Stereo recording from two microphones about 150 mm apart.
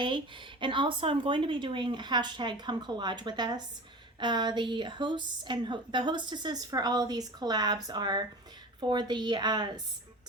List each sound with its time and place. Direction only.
0.0 s a woman's voice: 35° right (ahead or behind)